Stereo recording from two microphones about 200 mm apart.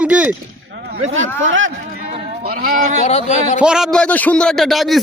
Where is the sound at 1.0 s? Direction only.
75° right (ahead or behind).